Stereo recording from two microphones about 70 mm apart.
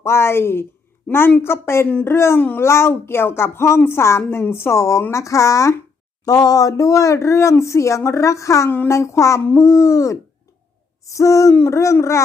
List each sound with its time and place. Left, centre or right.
0.0 s speech: left
1.1 s a woman's voice: centre
1.4 s speech: left
6.2 s speech: left